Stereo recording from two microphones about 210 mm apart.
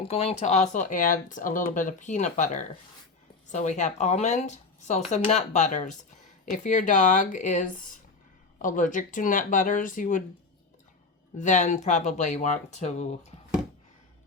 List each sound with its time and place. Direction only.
0.0 s speech: 30° left (ahead or behind)
11.3 s speech: 35° left (ahead or behind)